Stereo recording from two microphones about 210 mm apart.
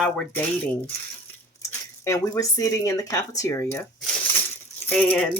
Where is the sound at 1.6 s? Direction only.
15° left (ahead or behind).